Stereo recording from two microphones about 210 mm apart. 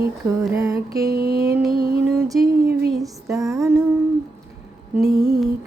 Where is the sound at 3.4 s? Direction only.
15° right (ahead or behind).